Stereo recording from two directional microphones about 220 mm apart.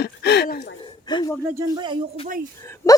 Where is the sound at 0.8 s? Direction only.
20° left (ahead or behind).